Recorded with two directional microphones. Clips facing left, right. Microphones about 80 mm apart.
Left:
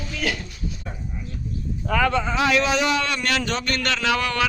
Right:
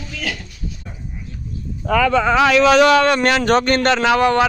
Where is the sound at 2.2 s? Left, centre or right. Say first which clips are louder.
Right 8 dB; right.